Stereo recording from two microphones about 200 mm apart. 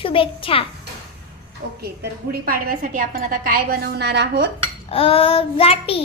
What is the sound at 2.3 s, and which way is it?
A woman's voice, 50° right (ahead or behind).